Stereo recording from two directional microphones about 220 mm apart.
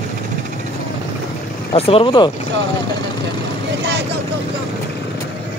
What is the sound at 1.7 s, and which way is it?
Speech, 25° left (ahead or behind).